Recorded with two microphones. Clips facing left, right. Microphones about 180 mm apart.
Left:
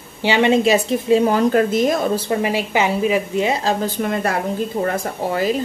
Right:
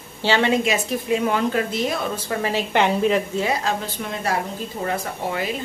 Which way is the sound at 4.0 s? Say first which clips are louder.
Left 5 dB; 55° left (ahead or behind).